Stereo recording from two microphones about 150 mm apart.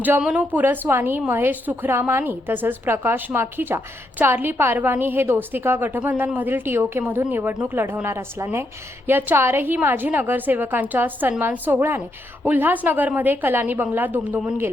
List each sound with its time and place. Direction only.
0.0 s a woman's voice: 10° right (ahead or behind)